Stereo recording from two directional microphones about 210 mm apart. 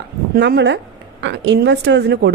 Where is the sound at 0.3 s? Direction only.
55° right (ahead or behind).